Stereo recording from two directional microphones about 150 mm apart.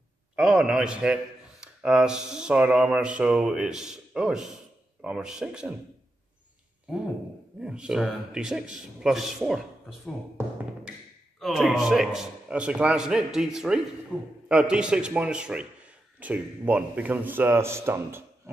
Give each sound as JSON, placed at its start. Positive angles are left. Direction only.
{"t": 0.4, "sound": "a man's voice", "side_deg": 0}
{"t": 7.6, "sound": "a man's voice", "side_deg": -5}
{"t": 10.4, "sound": "music", "side_deg": -15}
{"t": 11.3, "sound": "a man's voice", "side_deg": 0}
{"t": 14.1, "sound": "a man's voice", "side_deg": 10}
{"t": 14.5, "sound": "a man's voice", "side_deg": -5}